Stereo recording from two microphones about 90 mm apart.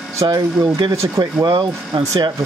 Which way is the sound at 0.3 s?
60° right (ahead or behind).